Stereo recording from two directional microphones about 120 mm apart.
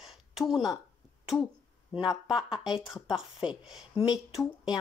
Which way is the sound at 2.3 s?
35° left (ahead or behind).